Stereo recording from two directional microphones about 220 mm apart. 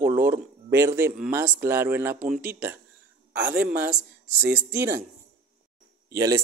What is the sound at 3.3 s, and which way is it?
Speech, 50° right (ahead or behind).